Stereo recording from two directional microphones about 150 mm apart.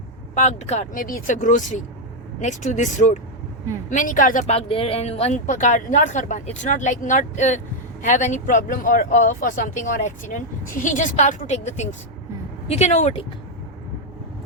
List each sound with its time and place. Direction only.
0.3 s speech: 50° left (ahead or behind)
0.9 s speech: 70° left (ahead or behind); by 5.4 s 45° left (ahead or behind)
5.5 s speech: 60° left (ahead or behind)